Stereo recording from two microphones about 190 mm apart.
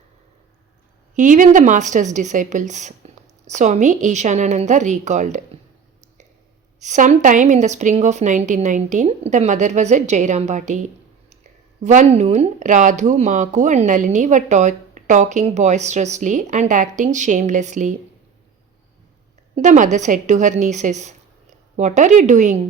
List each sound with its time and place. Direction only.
1.1 s speech: 40° right (ahead or behind)
6.7 s speech: 40° right (ahead or behind)
19.5 s speech: 40° right (ahead or behind)